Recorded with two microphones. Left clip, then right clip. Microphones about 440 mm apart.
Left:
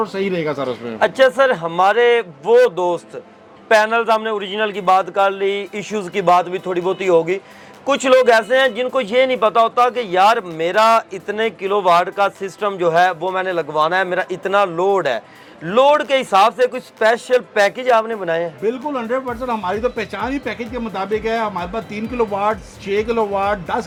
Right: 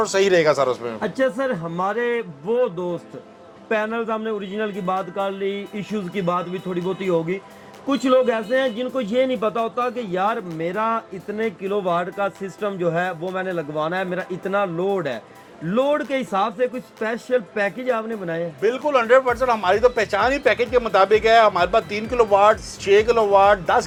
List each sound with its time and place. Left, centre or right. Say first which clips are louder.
0.0 s a man's voice: right 4 dB; right
1.0 s a man's voice: left 9 dB; left
18.6 s speech: right 2 dB; right